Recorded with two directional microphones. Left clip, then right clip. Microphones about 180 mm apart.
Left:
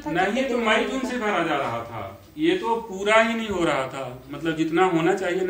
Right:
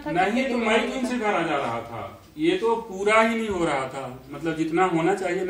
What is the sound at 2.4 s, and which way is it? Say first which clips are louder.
A woman's voice: even; 10° left (ahead or behind).